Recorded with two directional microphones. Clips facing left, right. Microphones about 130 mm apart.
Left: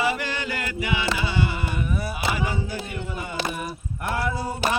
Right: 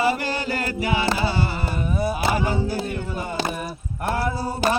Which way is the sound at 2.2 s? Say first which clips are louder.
Right 4 dB; 40° right (ahead or behind).